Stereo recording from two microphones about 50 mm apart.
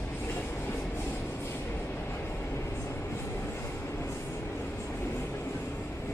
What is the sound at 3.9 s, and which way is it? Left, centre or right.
Train, left.